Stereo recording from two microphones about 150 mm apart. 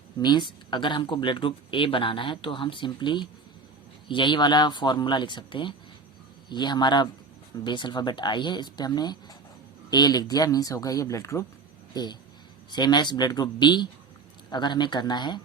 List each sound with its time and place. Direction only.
0.2 s speech: 30° left (ahead or behind)